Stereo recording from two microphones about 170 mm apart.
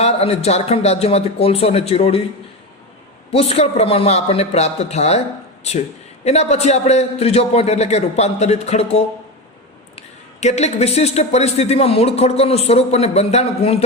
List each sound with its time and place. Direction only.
0.0 s speech: 40° left (ahead or behind)
3.3 s speech: 40° left (ahead or behind)
10.4 s speech: 40° left (ahead or behind)